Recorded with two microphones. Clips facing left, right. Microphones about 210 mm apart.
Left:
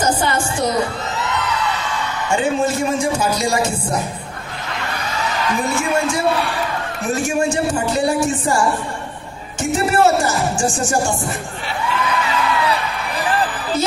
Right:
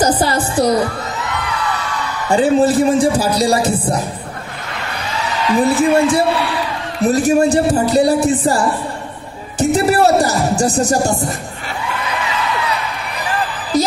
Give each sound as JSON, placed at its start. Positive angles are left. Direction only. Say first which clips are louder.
{"t": 0.0, "sound": "a sound", "louder": "right 3 dB", "side_deg": -35}
{"t": 2.2, "sound": "speech", "louder": "right 6 dB", "side_deg": -35}
{"t": 5.5, "sound": "speech", "louder": "right 9 dB", "side_deg": -35}
{"t": 13.7, "sound": "music", "louder": "right 5 dB", "side_deg": -35}